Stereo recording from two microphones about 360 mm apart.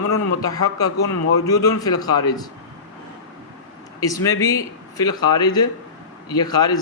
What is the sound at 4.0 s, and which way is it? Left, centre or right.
Speech, centre.